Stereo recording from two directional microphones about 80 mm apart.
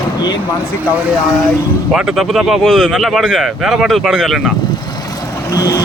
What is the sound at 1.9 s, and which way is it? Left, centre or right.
Speech, centre.